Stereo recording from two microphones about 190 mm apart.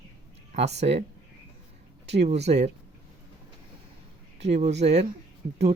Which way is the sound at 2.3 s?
35° right (ahead or behind).